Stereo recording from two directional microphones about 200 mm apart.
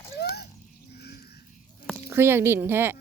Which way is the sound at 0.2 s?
55° left (ahead or behind).